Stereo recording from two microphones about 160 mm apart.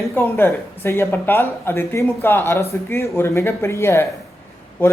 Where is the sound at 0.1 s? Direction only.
15° left (ahead or behind).